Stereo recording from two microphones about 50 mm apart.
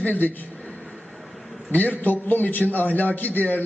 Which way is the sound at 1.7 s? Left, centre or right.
Left.